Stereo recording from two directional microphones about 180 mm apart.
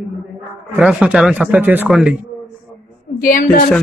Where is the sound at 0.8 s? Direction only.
5° right (ahead or behind).